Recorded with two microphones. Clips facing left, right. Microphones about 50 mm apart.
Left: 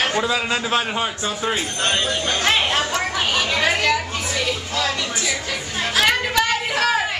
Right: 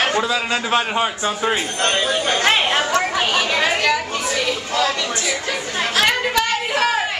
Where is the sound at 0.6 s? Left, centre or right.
Centre.